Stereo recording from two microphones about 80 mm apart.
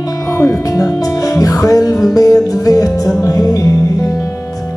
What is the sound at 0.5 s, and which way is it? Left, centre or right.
Music, left.